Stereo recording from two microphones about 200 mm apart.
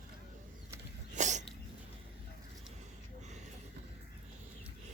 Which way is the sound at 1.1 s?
35° right (ahead or behind).